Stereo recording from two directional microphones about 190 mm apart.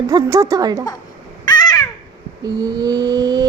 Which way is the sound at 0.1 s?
20° right (ahead or behind).